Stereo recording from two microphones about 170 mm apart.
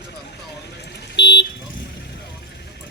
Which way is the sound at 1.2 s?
90° left.